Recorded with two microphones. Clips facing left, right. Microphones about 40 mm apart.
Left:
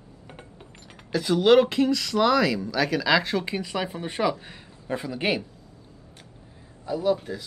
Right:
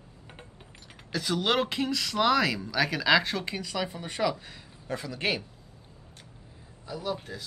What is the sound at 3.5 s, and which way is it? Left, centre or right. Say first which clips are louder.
Speech: left 4 dB; left.